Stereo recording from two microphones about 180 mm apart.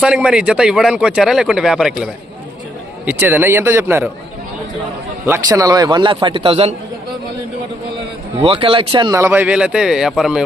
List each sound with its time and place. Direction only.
0.0 s speech: 5° right (ahead or behind)
3.1 s speech: 10° right (ahead or behind)
5.2 s a man's voice: 15° right (ahead or behind); by 6.7 s 35° right (ahead or behind)
8.4 s speech: 30° right (ahead or behind); by 10.4 s 5° right (ahead or behind)